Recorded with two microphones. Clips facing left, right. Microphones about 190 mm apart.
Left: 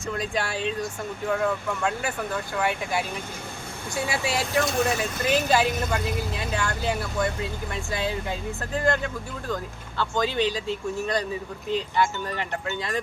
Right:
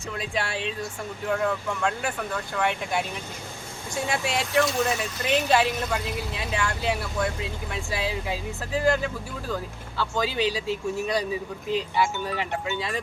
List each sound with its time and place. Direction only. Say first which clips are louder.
0.1 s speech: left 2 dB; centre (ahead or behind)
4.7 s speech: left 1 dB; 50° left (ahead or behind)
5.3 s speech: right 1 dB; centre (ahead or behind)